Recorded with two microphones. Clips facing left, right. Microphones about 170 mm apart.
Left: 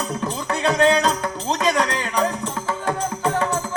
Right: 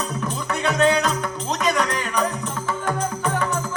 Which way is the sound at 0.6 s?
30° left (ahead or behind).